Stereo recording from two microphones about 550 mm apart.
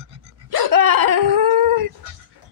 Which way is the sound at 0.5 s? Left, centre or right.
Right.